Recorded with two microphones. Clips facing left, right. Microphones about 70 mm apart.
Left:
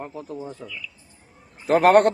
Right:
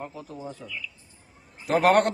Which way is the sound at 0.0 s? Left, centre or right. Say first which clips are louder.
Left 4 dB; left.